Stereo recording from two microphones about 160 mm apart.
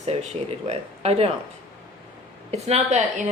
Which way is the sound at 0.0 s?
40° right (ahead or behind).